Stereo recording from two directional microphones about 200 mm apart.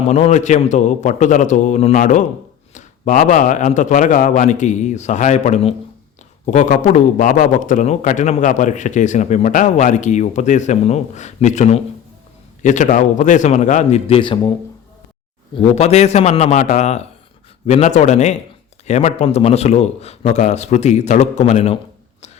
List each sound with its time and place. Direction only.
0.1 s a man's voice: 35° left (ahead or behind)
15.5 s a man's voice: 35° left (ahead or behind)